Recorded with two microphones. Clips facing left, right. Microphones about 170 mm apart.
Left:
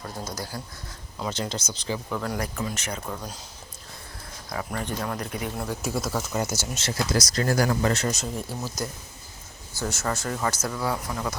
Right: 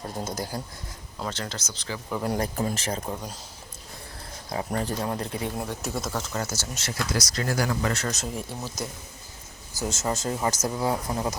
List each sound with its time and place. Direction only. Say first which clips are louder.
0.3 s speech: right 3 dB; 25° right (ahead or behind)
1.2 s speech: left 3 dB; 15° left (ahead or behind)
2.2 s speech: right 3 dB; 30° right (ahead or behind)
4.4 s speech: right 3 dB; 30° right (ahead or behind)
5.6 s speech: left 2 dB; centre (ahead or behind)
6.8 s speech: left 3 dB; 30° left (ahead or behind)
7.3 s speech: left 4 dB; 45° left (ahead or behind)
8.1 s speech: left 1 dB; centre (ahead or behind)
9.8 s speech: right 1 dB; 20° right (ahead or behind)